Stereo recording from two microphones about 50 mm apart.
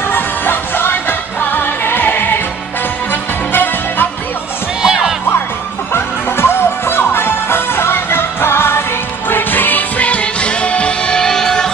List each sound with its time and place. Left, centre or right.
0.1 s music: left
4.8 s music: centre
5.9 s music: left
9.3 s music: left; by 11.7 s centre